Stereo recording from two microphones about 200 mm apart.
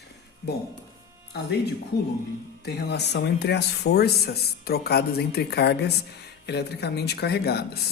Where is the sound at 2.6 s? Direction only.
55° left (ahead or behind).